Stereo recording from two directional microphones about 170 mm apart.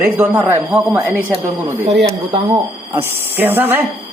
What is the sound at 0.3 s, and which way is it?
Speech, 10° right (ahead or behind).